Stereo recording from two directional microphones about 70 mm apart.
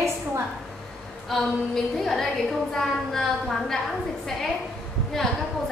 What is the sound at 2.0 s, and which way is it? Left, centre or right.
A woman's voice, centre.